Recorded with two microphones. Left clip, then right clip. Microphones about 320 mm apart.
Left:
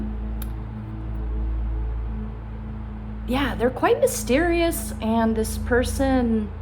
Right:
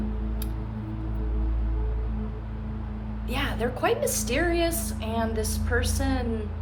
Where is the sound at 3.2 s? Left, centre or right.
Left.